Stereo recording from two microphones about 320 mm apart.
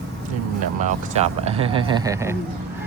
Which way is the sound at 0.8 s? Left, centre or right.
Right.